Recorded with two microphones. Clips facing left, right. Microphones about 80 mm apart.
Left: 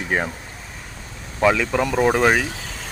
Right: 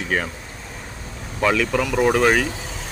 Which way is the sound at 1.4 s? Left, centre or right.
Centre.